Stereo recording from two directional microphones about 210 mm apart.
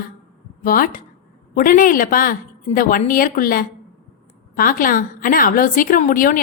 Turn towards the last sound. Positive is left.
turn(degrees=40)  # may be behind; listen again after turning